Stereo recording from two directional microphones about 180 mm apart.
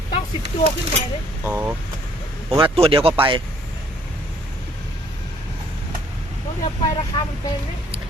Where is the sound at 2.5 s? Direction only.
30° right (ahead or behind).